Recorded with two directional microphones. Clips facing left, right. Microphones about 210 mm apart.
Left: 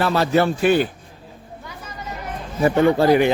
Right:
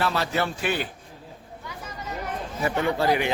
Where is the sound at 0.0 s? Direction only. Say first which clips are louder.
Left 8 dB; 45° left (ahead or behind).